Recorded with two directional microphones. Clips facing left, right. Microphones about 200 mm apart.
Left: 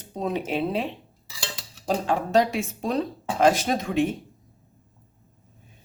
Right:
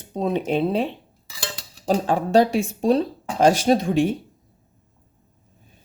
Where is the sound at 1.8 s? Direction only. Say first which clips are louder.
Right 4 dB; 35° right (ahead or behind).